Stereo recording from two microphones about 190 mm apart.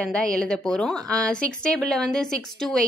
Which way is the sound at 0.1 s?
5° left (ahead or behind).